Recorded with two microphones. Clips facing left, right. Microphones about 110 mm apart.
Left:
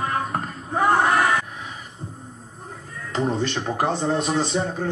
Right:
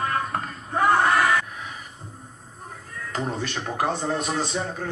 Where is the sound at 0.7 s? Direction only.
10° left (ahead or behind).